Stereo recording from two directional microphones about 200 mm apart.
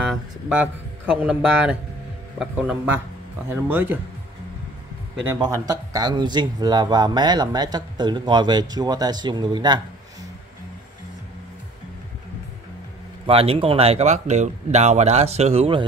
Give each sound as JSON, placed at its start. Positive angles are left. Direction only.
{"t": 0.0, "sound": "speech", "side_deg": -5}
{"t": 5.2, "sound": "speech", "side_deg": -15}
{"t": 13.3, "sound": "speech", "side_deg": -30}